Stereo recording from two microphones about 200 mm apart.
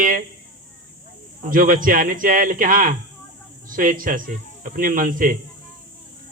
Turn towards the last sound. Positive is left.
turn(degrees=-45)  # may be behind; listen again after turning